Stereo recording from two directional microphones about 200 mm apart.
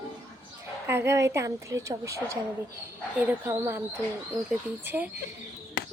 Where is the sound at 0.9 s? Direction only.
15° right (ahead or behind).